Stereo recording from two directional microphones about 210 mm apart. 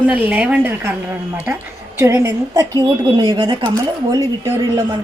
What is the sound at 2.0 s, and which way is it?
A woman's voice, 15° right (ahead or behind).